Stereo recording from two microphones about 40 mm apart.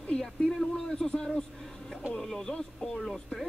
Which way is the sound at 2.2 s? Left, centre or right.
Centre.